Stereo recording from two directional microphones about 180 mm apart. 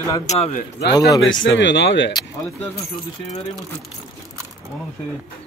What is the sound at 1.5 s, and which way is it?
Speech, 80° left.